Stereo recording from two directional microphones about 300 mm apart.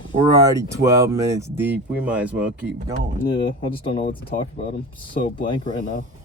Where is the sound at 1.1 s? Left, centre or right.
Centre.